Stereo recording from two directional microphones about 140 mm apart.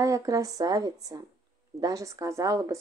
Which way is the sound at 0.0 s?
25° right (ahead or behind).